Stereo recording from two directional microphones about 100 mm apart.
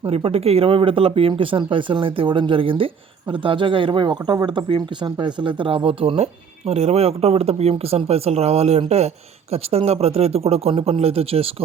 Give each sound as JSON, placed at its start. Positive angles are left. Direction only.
{"t": 0.0, "sound": "speech", "side_deg": -75}
{"t": 6.7, "sound": "speech", "side_deg": -90}